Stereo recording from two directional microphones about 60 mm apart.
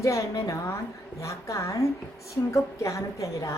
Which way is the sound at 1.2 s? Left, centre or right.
Left.